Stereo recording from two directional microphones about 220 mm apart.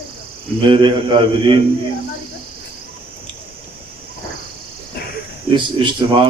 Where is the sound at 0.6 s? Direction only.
20° right (ahead or behind).